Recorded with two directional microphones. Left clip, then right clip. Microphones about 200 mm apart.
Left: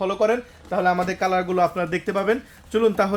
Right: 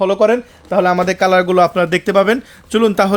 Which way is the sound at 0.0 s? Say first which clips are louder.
Right 8 dB; 50° right (ahead or behind).